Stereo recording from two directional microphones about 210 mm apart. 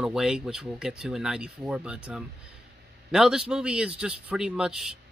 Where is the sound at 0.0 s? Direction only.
5° right (ahead or behind).